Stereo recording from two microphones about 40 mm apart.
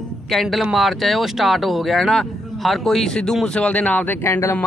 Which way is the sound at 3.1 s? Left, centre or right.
Centre.